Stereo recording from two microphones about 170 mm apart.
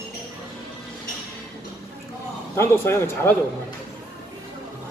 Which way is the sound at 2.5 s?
15° left (ahead or behind).